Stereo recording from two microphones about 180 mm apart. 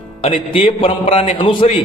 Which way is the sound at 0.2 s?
30° left (ahead or behind).